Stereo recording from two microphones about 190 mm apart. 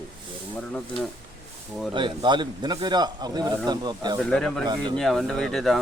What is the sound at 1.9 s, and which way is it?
Speech, 25° right (ahead or behind).